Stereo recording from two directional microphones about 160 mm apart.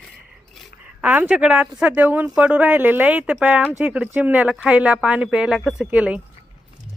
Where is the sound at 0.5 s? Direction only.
Centre (ahead or behind).